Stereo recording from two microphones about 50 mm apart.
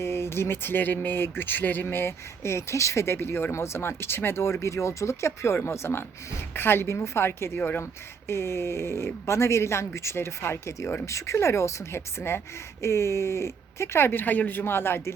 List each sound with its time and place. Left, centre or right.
0.0 s speech: left
5.6 s speech: left
12.8 s speech: left